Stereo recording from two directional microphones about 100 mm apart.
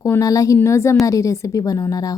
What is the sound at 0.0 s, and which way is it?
A woman's voice, 35° left (ahead or behind).